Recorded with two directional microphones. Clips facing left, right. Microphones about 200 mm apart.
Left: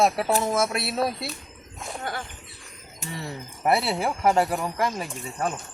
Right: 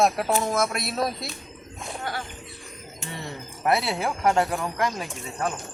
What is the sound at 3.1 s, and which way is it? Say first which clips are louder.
Speech: left 2 dB; 5° left (ahead or behind).